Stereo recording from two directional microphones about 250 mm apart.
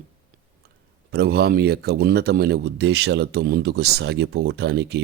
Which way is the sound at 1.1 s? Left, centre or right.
Right.